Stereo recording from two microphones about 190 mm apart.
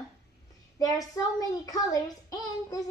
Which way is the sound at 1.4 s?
20° left (ahead or behind).